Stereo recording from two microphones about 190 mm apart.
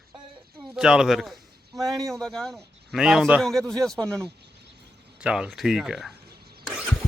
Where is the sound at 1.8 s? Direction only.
20° right (ahead or behind).